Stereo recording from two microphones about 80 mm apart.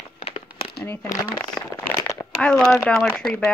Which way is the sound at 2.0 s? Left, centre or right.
Left.